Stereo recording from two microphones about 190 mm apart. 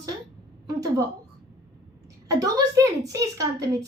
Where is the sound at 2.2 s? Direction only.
20° right (ahead or behind).